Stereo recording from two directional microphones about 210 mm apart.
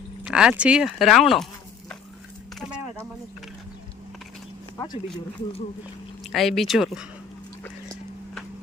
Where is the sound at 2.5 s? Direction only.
Centre (ahead or behind).